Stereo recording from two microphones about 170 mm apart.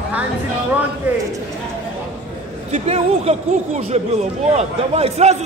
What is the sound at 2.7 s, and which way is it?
Speech, 35° right (ahead or behind).